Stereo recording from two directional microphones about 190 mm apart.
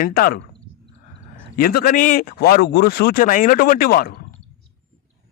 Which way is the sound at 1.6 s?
50° left (ahead or behind).